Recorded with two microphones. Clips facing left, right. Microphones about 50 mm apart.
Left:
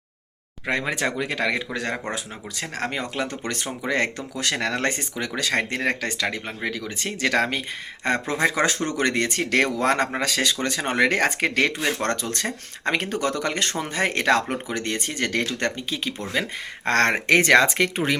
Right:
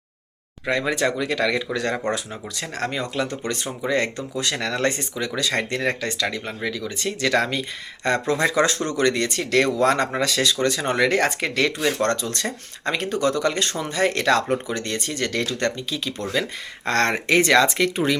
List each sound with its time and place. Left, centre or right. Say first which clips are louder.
0.6 s speech: right 3 dB; left